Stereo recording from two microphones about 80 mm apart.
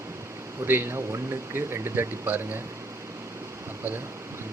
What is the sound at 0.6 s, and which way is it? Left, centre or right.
Speech, right.